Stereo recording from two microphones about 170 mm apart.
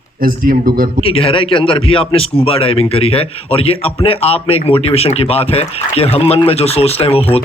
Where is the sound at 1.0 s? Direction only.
35° left (ahead or behind).